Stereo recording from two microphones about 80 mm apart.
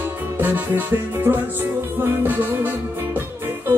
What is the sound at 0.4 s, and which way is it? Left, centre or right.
Music, right.